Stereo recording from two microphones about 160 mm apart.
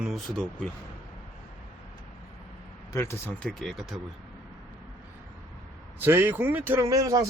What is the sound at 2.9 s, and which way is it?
Speech, 15° left (ahead or behind).